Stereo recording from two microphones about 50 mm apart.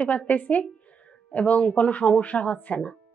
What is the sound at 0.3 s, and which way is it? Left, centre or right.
A woman's voice, left.